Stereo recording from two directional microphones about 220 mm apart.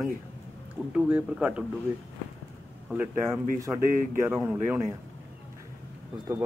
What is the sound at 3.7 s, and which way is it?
Speech, 40° right (ahead or behind).